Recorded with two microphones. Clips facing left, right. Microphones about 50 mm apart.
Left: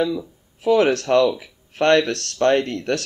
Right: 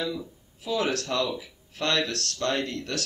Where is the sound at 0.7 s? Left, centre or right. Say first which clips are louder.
Left 11 dB; left.